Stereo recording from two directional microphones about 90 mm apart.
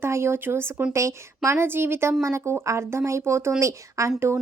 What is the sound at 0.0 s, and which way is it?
A woman's voice, 30° right (ahead or behind).